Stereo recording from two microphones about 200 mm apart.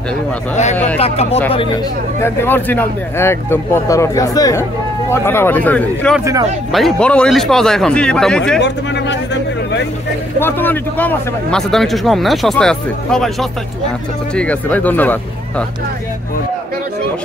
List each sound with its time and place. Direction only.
0.9 s speech: 30° left (ahead or behind)
2.2 s a man's voice: 10° left (ahead or behind)
8.5 s speech: 60° left (ahead or behind)
10.4 s a man's voice: 10° left (ahead or behind)